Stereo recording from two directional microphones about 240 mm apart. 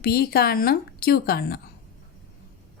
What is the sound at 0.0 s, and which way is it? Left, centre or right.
A woman's voice, left.